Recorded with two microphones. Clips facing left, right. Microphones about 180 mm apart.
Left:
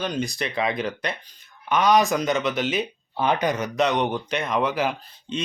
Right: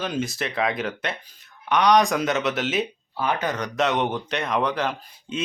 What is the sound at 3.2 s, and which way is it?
Speech, 15° left (ahead or behind).